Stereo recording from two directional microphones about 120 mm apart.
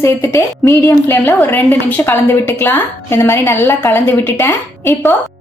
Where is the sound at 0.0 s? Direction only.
20° left (ahead or behind).